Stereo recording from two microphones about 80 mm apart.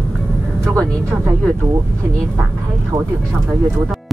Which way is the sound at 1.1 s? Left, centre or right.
Right.